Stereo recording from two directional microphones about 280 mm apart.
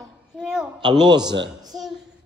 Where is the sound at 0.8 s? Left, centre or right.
Centre.